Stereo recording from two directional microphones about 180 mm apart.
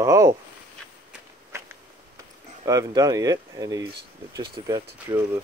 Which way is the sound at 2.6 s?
20° right (ahead or behind).